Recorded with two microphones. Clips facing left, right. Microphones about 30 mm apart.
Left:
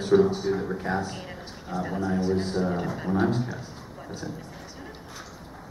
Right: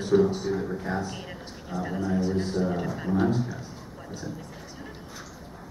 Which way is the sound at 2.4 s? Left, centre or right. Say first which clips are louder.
Even; left.